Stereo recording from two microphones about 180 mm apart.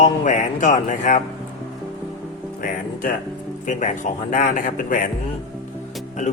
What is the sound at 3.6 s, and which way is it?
Speech, 45° left (ahead or behind).